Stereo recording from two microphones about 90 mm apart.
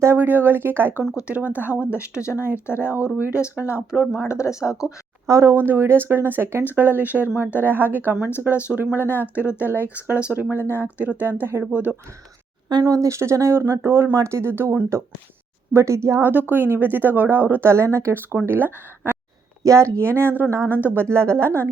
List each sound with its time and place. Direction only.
0.0 s speech: 25° right (ahead or behind)
3.9 s speech: 5° left (ahead or behind)
4.3 s speech: 35° left (ahead or behind)
5.2 s speech: 35° right (ahead or behind)
10.3 s speech: 10° right (ahead or behind)
12.8 s speech: 35° right (ahead or behind)
19.6 s speech: 35° right (ahead or behind)